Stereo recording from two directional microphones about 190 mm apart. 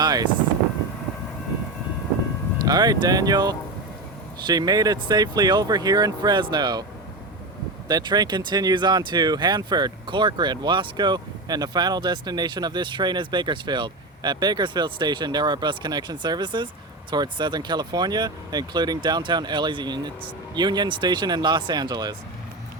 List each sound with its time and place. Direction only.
0.0 s speech: 20° right (ahead or behind)
2.6 s speech: 20° right (ahead or behind)
7.9 s speech: 20° right (ahead or behind)